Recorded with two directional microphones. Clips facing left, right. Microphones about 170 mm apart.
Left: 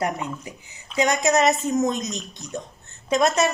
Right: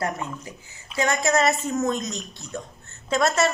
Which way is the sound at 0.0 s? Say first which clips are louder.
Left 2 dB; 15° left (ahead or behind).